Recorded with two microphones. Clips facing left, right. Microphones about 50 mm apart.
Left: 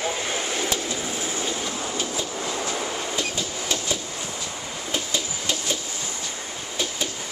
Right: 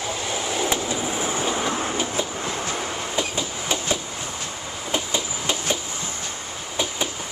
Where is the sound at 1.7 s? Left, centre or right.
Right.